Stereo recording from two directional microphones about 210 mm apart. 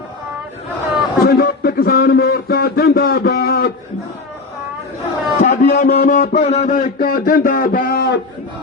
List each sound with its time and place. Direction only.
1.2 s a man's voice: 50° left (ahead or behind)
5.4 s a man's voice: 40° left (ahead or behind)